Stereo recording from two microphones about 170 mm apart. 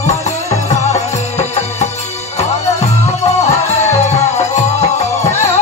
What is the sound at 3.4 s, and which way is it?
Music, 40° left (ahead or behind).